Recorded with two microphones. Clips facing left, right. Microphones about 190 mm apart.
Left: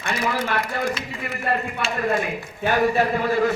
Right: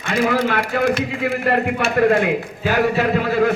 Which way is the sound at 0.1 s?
55° right (ahead or behind).